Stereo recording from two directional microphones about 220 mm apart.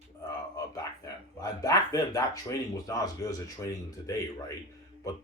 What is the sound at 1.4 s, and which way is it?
Speech, 15° left (ahead or behind).